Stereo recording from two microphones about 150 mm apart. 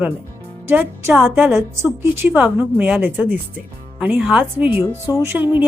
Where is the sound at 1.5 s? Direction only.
20° right (ahead or behind).